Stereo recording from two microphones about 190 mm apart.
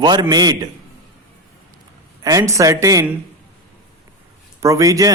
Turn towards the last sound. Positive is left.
turn(degrees=-15)  # may be behind; listen again after turning